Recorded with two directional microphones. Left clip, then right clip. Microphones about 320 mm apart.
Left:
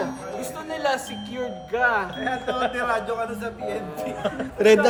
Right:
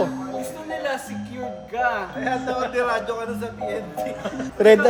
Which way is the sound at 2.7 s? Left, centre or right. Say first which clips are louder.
Right 2 dB; centre.